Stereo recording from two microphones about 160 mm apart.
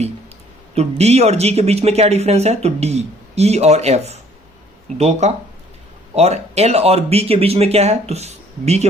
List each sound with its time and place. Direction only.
0.7 s speech: 40° right (ahead or behind)